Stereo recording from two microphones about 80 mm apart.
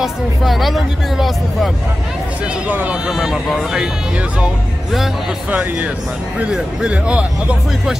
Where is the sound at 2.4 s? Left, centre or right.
Centre.